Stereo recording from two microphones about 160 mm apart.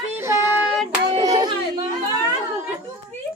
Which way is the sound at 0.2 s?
15° right (ahead or behind).